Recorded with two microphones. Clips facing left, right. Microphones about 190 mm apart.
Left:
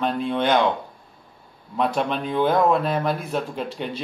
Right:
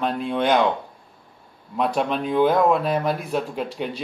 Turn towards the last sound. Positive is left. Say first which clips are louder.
# right 1 dB
turn(degrees=-5)  # may be behind; listen again after turning